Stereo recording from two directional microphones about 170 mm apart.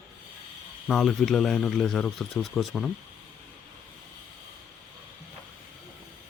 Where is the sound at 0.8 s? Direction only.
Centre (ahead or behind).